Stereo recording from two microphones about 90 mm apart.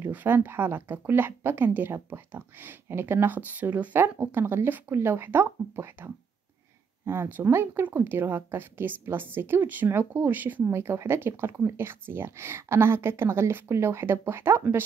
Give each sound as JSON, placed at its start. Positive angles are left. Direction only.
{"t": 0.0, "sound": "a woman's voice", "side_deg": -20}